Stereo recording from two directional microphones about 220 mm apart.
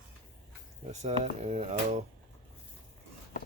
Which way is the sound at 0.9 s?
30° right (ahead or behind).